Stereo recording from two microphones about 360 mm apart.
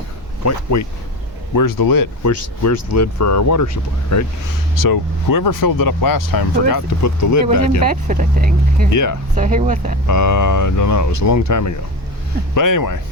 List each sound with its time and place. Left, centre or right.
0.4 s speech: left
1.5 s speech: left
2.6 s speech: left
4.8 s speech: left
7.9 s speech: right
8.9 s speech: left
9.3 s speech: centre
10.1 s speech: left